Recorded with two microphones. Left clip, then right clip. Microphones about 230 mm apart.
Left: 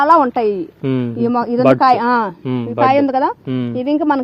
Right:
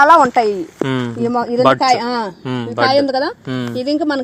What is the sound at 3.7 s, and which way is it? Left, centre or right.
Speech, left.